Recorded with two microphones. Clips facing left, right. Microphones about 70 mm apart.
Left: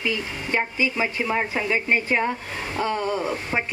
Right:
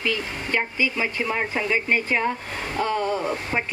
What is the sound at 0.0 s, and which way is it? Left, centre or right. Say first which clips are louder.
Speech: even; centre.